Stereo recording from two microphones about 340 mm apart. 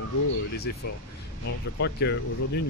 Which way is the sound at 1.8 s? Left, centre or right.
Left.